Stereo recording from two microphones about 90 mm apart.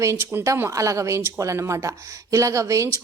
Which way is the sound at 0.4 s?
35° right (ahead or behind).